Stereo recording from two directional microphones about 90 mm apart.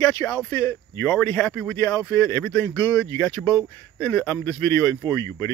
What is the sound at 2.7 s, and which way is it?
Speech, 40° left (ahead or behind).